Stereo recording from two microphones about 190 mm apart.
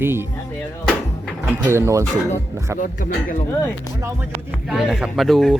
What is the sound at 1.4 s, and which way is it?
Speech, 10° right (ahead or behind).